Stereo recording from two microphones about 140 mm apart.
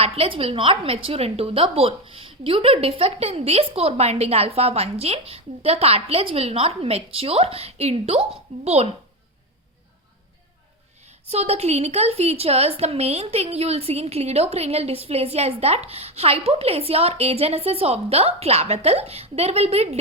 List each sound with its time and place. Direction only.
0.0 s a woman's voice: 45° right (ahead or behind)
11.3 s a woman's voice: 50° right (ahead or behind)